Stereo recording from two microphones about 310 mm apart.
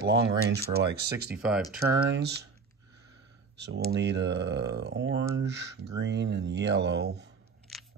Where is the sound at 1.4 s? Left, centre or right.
Centre.